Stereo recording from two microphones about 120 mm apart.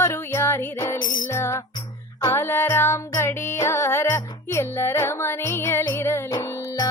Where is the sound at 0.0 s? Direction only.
20° left (ahead or behind).